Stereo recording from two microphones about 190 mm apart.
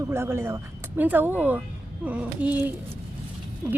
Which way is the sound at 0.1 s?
15° right (ahead or behind).